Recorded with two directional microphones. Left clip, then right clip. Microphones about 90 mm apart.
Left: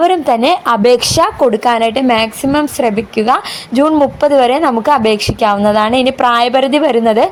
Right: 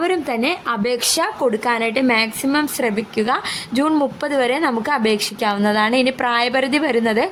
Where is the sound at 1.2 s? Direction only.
55° left (ahead or behind).